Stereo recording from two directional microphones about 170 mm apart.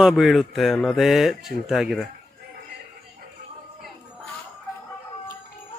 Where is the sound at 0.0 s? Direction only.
5° right (ahead or behind).